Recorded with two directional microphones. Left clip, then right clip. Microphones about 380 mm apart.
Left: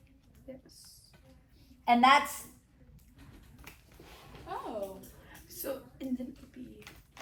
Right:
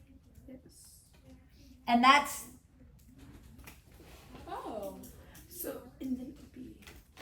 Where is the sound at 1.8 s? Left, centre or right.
Centre.